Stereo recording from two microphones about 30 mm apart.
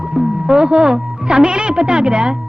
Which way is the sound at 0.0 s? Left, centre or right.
Right.